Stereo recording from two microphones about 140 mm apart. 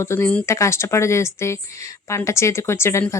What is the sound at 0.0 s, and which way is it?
A woman's voice, 20° left (ahead or behind).